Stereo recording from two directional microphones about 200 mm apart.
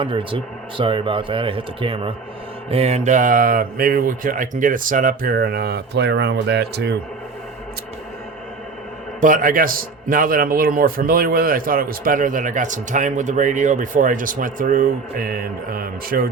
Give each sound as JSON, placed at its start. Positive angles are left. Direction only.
{"t": 0.0, "sound": "a man's voice", "side_deg": -25}
{"t": 9.2, "sound": "a man's voice", "side_deg": -40}